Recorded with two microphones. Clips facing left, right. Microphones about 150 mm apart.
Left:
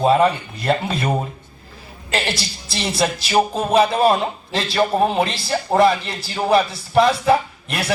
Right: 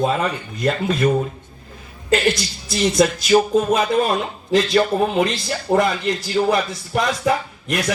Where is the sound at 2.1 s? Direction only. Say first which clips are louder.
Right 6 dB; 30° left (ahead or behind).